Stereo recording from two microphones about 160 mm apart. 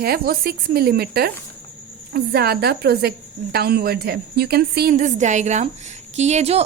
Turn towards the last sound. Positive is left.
turn(degrees=-40)  # may be behind; listen again after turning